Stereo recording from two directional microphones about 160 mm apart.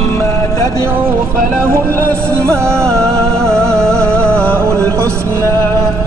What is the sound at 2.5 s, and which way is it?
Music, 15° right (ahead or behind).